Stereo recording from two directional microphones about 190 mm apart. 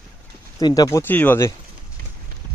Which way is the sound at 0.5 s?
20° left (ahead or behind).